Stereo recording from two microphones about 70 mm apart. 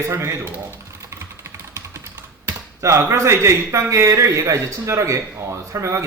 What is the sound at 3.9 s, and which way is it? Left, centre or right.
A man's voice, right.